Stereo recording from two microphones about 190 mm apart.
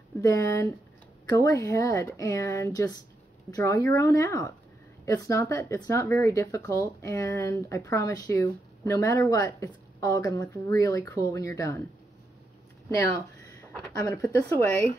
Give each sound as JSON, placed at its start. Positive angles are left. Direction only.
{"t": 0.1, "sound": "speech", "side_deg": 15}
{"t": 13.9, "sound": "speech", "side_deg": 15}